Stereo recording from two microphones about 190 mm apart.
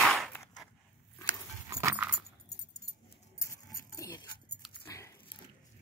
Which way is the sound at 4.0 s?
15° left (ahead or behind).